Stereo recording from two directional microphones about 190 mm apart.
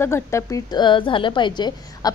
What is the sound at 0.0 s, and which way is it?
A woman's voice, 15° left (ahead or behind).